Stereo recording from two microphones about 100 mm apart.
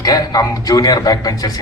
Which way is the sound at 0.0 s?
40° left (ahead or behind).